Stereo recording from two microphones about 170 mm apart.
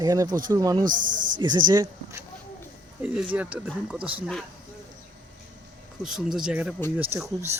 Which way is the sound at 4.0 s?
30° right (ahead or behind).